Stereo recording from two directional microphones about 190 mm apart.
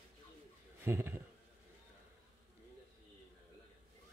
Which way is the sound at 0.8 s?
10° right (ahead or behind).